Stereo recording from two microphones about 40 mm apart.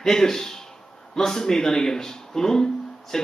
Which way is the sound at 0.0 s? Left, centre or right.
Centre.